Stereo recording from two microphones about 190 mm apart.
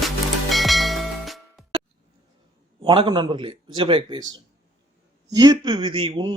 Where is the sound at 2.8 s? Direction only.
25° right (ahead or behind).